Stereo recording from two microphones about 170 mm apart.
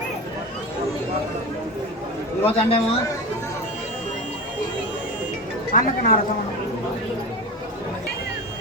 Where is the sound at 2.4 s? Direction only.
35° left (ahead or behind).